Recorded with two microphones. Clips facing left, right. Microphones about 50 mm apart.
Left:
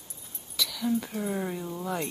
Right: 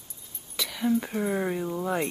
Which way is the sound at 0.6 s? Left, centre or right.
Right.